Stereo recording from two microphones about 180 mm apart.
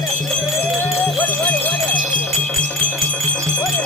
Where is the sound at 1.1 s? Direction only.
10° left (ahead or behind).